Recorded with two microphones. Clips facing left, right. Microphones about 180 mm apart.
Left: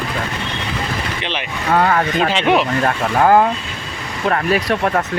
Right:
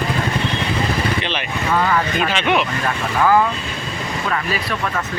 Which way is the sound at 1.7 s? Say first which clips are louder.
Left 3 dB; 55° left (ahead or behind).